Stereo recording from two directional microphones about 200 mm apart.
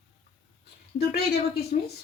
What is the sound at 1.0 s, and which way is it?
Speech, 55° left (ahead or behind).